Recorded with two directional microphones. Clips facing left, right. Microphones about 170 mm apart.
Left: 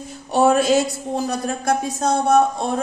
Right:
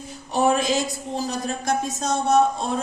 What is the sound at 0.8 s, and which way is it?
Speech, 60° left (ahead or behind).